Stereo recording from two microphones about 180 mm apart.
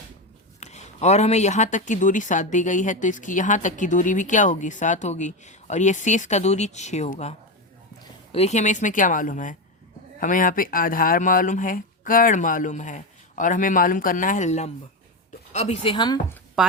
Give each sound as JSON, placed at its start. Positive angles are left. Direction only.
{"t": 0.6, "sound": "speech", "side_deg": 40}